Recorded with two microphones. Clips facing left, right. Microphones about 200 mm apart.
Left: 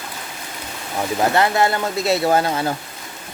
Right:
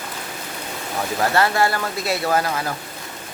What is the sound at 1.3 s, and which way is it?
Speech, 20° left (ahead or behind).